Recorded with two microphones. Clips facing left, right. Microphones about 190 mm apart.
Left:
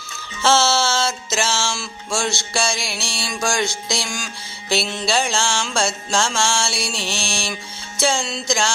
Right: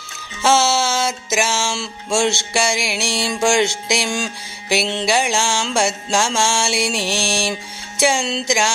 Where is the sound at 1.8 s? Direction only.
25° right (ahead or behind).